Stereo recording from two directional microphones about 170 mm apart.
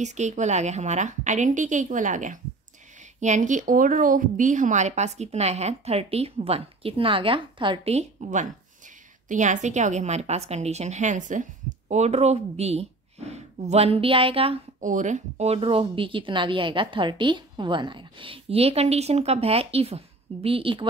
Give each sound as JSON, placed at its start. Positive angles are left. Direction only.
{"t": 0.0, "sound": "a woman's voice", "side_deg": -45}
{"t": 14.8, "sound": "a woman's voice", "side_deg": -50}